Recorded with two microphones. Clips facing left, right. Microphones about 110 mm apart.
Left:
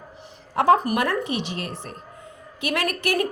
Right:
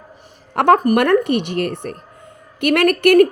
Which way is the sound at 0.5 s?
65° right (ahead or behind).